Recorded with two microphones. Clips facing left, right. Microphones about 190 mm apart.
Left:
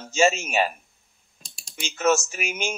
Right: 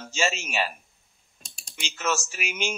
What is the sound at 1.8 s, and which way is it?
Speech, 45° left (ahead or behind).